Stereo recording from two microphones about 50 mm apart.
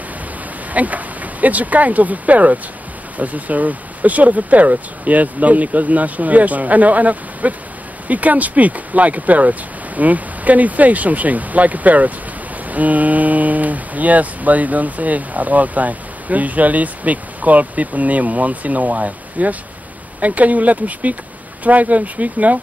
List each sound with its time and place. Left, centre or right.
0.7 s speech: right